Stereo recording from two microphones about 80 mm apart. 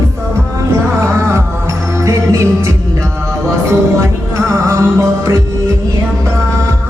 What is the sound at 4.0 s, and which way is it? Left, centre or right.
Music, right.